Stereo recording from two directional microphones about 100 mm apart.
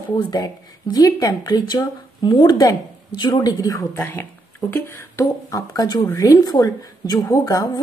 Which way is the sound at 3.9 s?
25° left (ahead or behind).